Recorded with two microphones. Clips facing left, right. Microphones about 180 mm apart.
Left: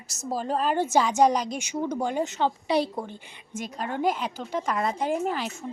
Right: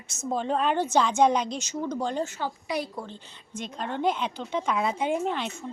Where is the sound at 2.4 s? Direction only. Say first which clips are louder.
Left 6 dB; 30° left (ahead or behind).